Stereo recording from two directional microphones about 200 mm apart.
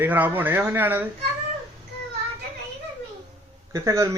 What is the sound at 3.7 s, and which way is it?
Speech, 15° right (ahead or behind).